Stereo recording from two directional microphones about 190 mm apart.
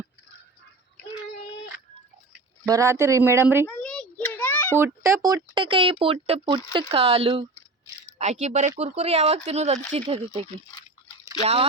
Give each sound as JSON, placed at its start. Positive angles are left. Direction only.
{"t": 2.6, "sound": "speech", "side_deg": -15}
{"t": 3.7, "sound": "a sound", "side_deg": 5}
{"t": 4.8, "sound": "speech", "side_deg": -15}